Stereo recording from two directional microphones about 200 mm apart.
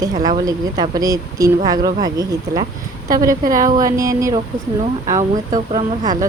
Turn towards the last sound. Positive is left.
turn(degrees=-20)  # may be behind; listen again after turning